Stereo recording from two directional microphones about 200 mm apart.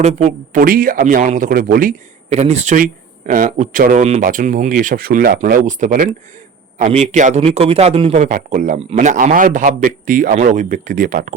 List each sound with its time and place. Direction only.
0.0 s speech: 35° right (ahead or behind)